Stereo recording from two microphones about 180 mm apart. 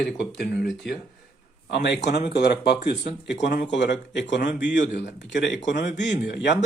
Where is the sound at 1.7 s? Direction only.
70° left (ahead or behind); by 5.5 s 90° left.